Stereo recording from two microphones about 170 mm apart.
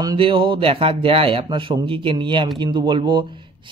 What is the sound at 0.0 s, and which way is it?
A man's voice, 30° right (ahead or behind).